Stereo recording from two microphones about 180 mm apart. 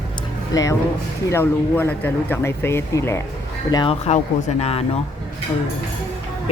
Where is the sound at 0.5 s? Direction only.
20° left (ahead or behind).